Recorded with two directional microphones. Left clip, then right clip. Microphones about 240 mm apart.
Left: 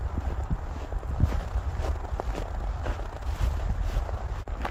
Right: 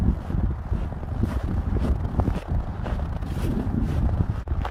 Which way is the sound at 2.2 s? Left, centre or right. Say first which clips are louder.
Right 6 dB; centre.